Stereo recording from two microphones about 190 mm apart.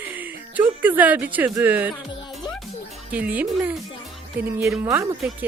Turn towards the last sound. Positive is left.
turn(degrees=-10)  # may be behind; listen again after turning